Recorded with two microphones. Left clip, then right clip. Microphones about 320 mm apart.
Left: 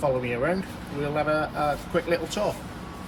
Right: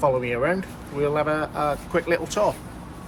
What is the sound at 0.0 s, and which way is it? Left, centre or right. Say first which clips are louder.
Speech: right 4 dB; centre.